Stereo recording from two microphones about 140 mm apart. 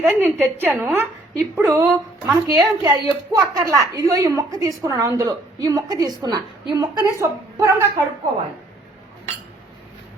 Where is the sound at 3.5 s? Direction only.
25° right (ahead or behind).